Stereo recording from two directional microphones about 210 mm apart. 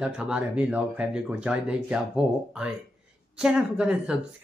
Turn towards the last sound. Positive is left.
turn(degrees=-5)  # may be behind; listen again after turning